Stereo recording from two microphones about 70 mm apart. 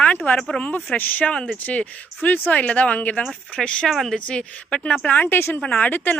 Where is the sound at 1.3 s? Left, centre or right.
Centre.